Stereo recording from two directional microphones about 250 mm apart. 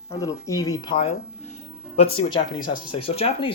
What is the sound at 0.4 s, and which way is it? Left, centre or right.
Speech, centre.